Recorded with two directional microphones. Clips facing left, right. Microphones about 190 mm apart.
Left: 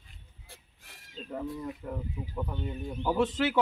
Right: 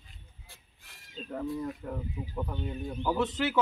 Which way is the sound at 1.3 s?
5° left (ahead or behind).